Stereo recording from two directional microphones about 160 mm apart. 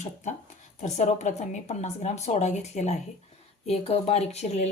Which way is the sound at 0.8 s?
45° left (ahead or behind).